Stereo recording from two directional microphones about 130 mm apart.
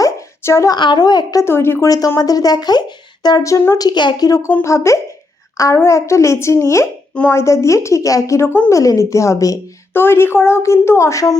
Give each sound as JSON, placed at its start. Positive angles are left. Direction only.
{"t": 0.0, "sound": "a sound", "side_deg": 20}
{"t": 0.8, "sound": "a woman's voice", "side_deg": 35}
{"t": 4.6, "sound": "a woman's voice", "side_deg": 20}
{"t": 7.1, "sound": "speech", "side_deg": 10}
{"t": 7.3, "sound": "a woman's voice", "side_deg": 20}